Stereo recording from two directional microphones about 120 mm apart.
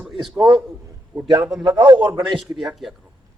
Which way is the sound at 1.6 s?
35° right (ahead or behind).